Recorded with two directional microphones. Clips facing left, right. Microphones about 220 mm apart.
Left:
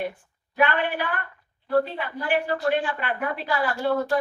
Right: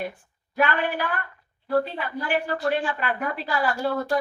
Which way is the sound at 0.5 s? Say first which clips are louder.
Left 1 dB; 45° right (ahead or behind).